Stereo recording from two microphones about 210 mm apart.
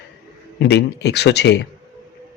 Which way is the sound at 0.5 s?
55° left (ahead or behind).